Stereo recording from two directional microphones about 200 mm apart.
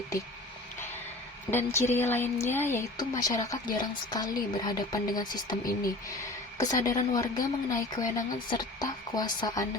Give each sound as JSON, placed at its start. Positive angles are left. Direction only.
{"t": 1.5, "sound": "a woman's voice", "side_deg": 10}
{"t": 6.6, "sound": "a woman's voice", "side_deg": 15}